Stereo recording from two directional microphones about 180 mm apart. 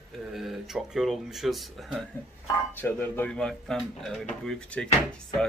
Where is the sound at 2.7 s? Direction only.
10° left (ahead or behind).